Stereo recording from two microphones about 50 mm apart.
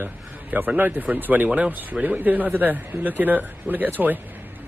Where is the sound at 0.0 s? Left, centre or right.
Right.